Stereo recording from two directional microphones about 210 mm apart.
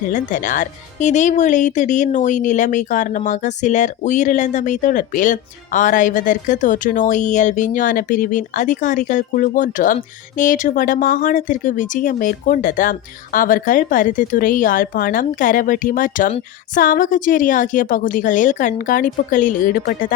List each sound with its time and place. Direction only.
0.1 s speech: 35° left (ahead or behind)